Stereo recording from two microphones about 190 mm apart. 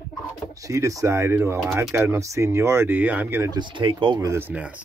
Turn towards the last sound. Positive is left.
turn(degrees=-10)  # may be behind; listen again after turning